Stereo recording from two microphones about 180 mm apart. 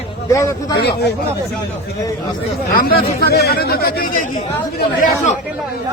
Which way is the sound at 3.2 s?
60° left (ahead or behind).